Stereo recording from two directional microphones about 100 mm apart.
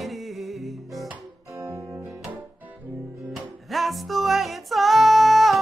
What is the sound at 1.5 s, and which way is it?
Music, 30° right (ahead or behind).